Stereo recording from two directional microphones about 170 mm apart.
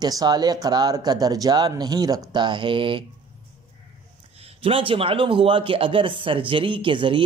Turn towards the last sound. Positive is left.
turn(degrees=-30)  # may be behind; listen again after turning